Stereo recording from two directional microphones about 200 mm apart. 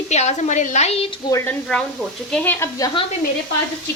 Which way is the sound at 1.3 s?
15° left (ahead or behind).